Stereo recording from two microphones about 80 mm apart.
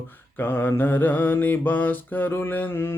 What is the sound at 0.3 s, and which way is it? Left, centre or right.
Mantra, left.